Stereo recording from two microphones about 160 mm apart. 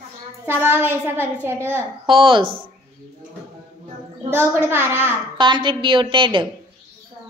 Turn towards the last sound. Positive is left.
turn(degrees=-30)  # may be behind; listen again after turning